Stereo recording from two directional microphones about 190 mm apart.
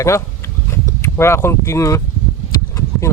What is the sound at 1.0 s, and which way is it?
Speech, 15° left (ahead or behind).